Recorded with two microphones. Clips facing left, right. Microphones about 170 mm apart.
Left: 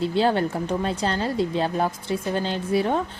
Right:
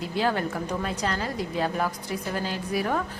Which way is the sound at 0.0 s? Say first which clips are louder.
Left 5 dB; 30° left (ahead or behind).